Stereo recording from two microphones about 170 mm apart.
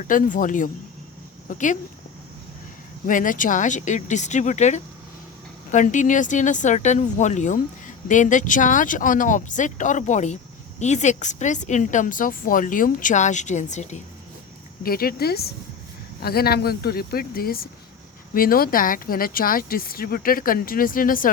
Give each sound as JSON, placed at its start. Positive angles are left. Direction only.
{"t": 0.1, "sound": "speech", "side_deg": 50}
{"t": 3.1, "sound": "speech", "side_deg": 50}
{"t": 14.8, "sound": "speech", "side_deg": 60}